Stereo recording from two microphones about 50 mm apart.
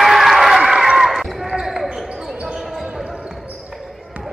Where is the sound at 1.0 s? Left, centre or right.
Centre.